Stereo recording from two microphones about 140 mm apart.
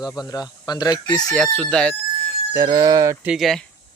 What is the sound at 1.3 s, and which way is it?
Speech, 5° left (ahead or behind).